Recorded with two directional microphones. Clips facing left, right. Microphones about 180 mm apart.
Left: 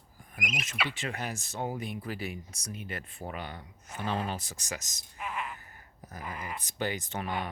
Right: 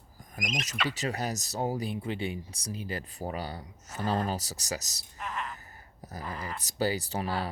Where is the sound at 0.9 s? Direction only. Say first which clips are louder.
Right 4 dB; 40° right (ahead or behind).